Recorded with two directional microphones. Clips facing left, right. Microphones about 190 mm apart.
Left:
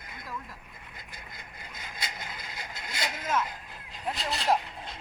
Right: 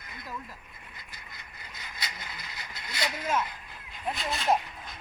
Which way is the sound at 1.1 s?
50° left (ahead or behind).